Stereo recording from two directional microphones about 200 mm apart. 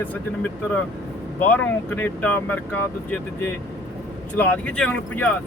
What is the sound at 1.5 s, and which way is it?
Speech, 10° left (ahead or behind).